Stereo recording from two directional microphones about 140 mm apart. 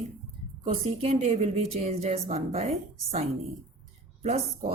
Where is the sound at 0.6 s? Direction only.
45° right (ahead or behind).